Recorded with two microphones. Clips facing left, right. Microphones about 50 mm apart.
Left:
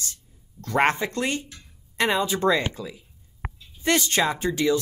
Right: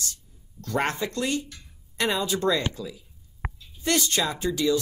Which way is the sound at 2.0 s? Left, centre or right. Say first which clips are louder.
Left 3 dB; left.